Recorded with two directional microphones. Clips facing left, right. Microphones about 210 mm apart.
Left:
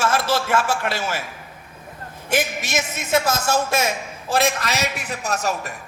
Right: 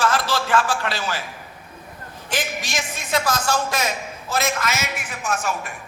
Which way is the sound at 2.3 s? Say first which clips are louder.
Left 5 dB; 25° left (ahead or behind).